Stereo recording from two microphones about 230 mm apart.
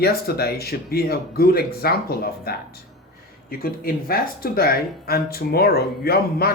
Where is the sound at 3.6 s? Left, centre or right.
Left.